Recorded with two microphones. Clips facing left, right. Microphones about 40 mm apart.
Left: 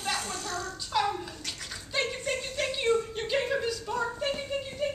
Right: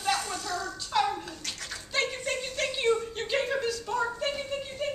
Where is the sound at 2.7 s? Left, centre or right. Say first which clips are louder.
Even; centre.